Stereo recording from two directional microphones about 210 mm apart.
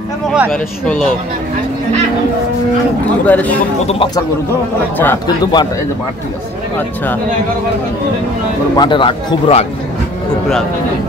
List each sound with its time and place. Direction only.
0.3 s speech: centre (ahead or behind)
3.3 s a man's voice: 5° left (ahead or behind)
3.8 s speech: 25° left (ahead or behind)
4.9 s speech: 10° left (ahead or behind)
8.7 s speech: 20° left (ahead or behind)